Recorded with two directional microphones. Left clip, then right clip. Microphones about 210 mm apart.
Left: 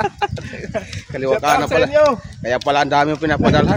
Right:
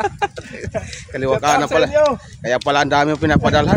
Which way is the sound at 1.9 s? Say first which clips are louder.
Left 3 dB; 20° left (ahead or behind).